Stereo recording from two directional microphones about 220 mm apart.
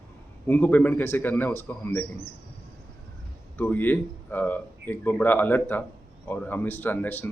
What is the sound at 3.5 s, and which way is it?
Speech, 10° left (ahead or behind).